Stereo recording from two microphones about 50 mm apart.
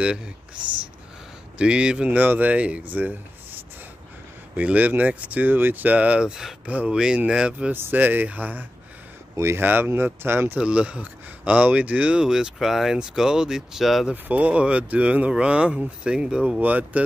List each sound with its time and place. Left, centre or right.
0.0 s speech: centre
1.6 s speech: centre; by 3.2 s right
4.6 s speech: right
6.6 s speech: right
6.9 s speech: centre
7.7 s speech: right
8.0 s speech: right
9.3 s speech: right
9.6 s speech: right
10.6 s speech: right
12.2 s speech: centre
14.1 s speech: right
16.6 s speech: right